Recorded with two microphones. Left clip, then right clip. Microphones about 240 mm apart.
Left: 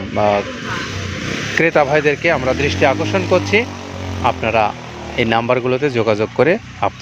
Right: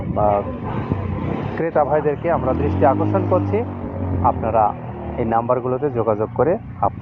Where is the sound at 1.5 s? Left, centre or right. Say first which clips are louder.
Left 5 dB; left.